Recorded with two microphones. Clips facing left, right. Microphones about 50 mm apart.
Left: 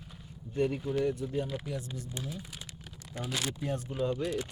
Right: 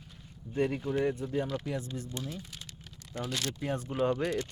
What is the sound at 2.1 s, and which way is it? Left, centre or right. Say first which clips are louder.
Speech: right 1 dB; centre.